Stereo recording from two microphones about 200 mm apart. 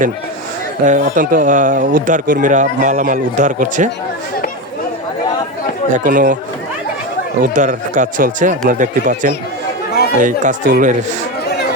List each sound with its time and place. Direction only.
0.9 s speech: 40° right (ahead or behind)
5.9 s speech: 40° right (ahead or behind)
7.5 s speech: 40° right (ahead or behind)